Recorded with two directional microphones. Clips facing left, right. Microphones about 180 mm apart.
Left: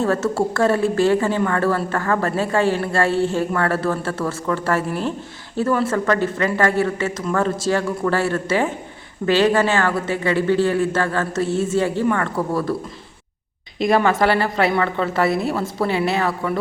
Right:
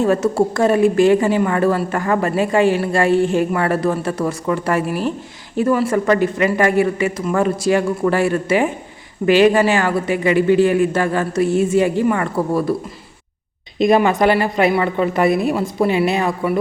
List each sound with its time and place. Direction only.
0.0 s a woman's voice: 15° right (ahead or behind)
13.7 s a woman's voice: 20° right (ahead or behind)